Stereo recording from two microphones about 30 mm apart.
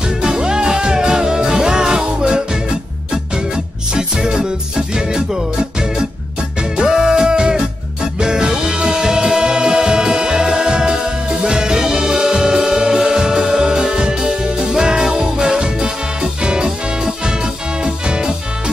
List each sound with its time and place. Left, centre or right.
0.2 s music: right
3.9 s music: right